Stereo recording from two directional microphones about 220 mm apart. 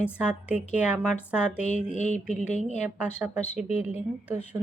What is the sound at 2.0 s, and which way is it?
Speech, 30° left (ahead or behind).